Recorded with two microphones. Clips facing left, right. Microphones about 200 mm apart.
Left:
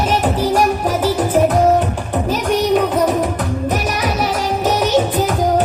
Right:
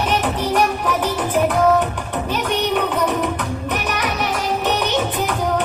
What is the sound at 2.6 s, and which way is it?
Music, 40° left (ahead or behind).